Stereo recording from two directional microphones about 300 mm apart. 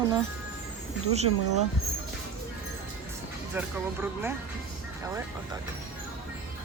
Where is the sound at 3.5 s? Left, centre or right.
Centre.